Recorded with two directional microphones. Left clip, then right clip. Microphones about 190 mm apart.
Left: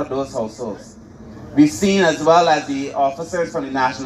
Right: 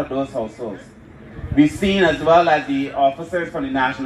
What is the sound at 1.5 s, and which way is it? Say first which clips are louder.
A man's voice: left 2 dB; 35° right (ahead or behind).